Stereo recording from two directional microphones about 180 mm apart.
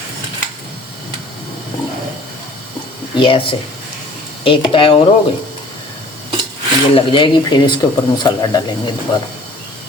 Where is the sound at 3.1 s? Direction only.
30° left (ahead or behind).